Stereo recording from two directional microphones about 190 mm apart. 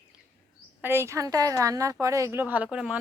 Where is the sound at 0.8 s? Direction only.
10° right (ahead or behind).